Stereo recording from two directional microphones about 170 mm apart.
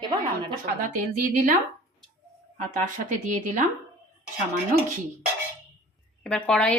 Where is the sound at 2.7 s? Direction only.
45° right (ahead or behind).